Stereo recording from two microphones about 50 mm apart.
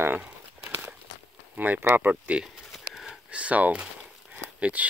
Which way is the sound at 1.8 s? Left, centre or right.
Right.